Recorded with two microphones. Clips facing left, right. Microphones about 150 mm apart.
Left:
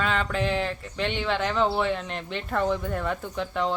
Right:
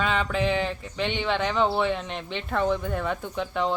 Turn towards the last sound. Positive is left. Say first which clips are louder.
# right 1 dB
turn(degrees=-5)  # may be behind; listen again after turning